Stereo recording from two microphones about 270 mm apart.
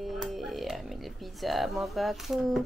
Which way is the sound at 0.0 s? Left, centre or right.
Centre.